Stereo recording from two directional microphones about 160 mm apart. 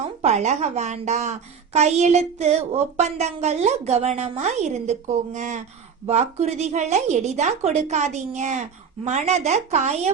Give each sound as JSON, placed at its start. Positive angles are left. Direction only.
{"t": 0.2, "sound": "a woman's voice", "side_deg": -45}